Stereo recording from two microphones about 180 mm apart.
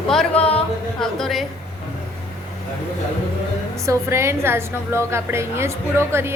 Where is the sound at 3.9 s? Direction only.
15° right (ahead or behind).